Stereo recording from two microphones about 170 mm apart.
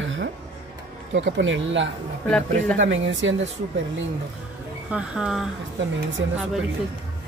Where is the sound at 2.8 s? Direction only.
90° right.